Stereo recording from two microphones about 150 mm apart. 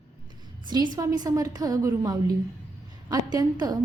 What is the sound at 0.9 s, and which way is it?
A woman's voice, 25° right (ahead or behind).